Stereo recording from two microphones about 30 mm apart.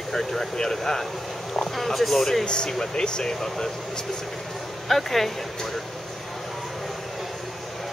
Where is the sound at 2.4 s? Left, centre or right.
Left.